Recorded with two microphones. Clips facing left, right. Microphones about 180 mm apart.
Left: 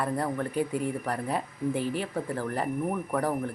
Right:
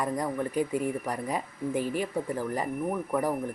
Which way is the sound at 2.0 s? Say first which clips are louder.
Right 1 dB; 10° right (ahead or behind).